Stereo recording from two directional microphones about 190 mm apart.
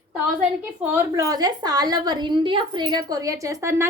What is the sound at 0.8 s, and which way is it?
A woman's voice, 10° right (ahead or behind).